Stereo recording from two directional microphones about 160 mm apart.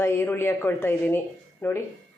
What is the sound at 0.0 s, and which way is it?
A woman's voice, 15° left (ahead or behind).